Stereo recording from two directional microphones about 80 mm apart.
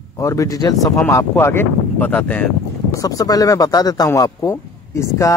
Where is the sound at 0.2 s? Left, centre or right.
Left.